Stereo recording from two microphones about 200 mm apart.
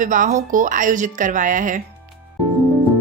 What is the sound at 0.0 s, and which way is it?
A woman's voice, 40° right (ahead or behind).